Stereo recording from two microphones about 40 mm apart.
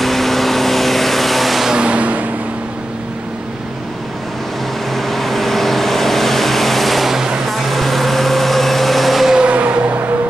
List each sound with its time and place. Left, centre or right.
0.0 s vehicle: centre
1.7 s vehicle: right
4.9 s vehicle: centre
9.5 s vehicle: right